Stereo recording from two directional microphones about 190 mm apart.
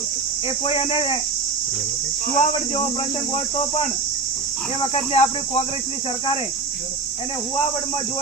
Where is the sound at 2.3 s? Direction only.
30° left (ahead or behind).